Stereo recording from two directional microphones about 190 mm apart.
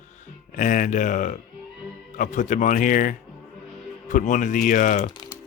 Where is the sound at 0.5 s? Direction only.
45° left (ahead or behind).